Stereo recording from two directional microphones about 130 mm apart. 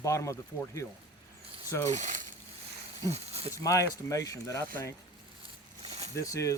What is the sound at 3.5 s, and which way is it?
Speech, 25° left (ahead or behind).